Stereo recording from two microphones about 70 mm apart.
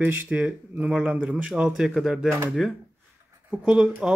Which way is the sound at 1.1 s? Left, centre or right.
Right.